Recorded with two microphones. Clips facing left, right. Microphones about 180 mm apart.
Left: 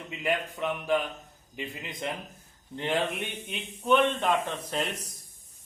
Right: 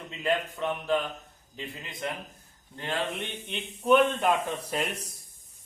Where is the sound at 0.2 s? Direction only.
15° left (ahead or behind).